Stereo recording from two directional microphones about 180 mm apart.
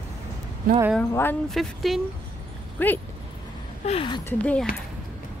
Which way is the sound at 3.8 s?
30° left (ahead or behind).